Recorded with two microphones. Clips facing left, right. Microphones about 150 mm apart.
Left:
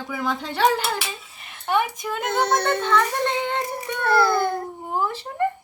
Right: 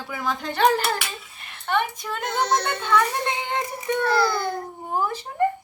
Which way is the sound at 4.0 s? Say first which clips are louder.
Left 3 dB; 55° left (ahead or behind).